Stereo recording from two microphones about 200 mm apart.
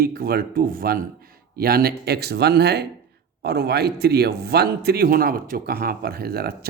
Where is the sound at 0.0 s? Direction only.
50° right (ahead or behind).